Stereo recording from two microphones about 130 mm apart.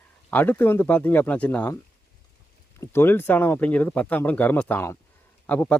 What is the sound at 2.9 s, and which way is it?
Speech, 15° left (ahead or behind).